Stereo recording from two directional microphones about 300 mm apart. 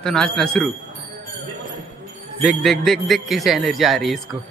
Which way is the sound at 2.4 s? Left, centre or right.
Centre.